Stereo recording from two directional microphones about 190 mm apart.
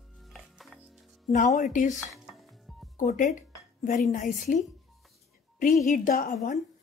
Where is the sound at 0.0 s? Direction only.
Centre (ahead or behind).